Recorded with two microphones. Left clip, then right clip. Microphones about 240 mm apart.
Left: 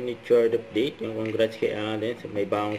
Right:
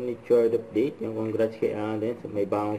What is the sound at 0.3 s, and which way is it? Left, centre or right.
Speech, left.